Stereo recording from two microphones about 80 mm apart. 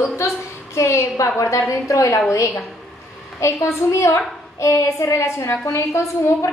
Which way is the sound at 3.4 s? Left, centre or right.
Left.